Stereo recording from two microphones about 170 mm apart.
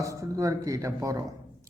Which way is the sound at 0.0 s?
20° right (ahead or behind).